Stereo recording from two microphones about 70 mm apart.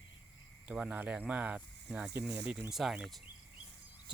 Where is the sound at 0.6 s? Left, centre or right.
Centre.